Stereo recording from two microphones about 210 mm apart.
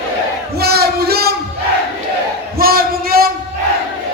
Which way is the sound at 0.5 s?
50° right (ahead or behind).